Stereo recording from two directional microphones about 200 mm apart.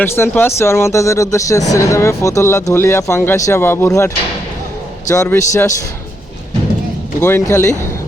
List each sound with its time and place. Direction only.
0.0 s speech: 10° left (ahead or behind)
7.2 s speech: 15° left (ahead or behind)